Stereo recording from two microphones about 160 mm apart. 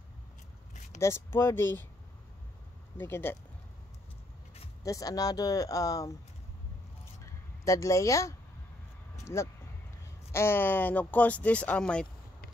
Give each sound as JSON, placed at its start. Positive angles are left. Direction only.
{"t": 0.9, "sound": "speech", "side_deg": 15}
{"t": 3.0, "sound": "speech", "side_deg": 15}
{"t": 4.8, "sound": "speech", "side_deg": 20}
{"t": 7.6, "sound": "speech", "side_deg": 20}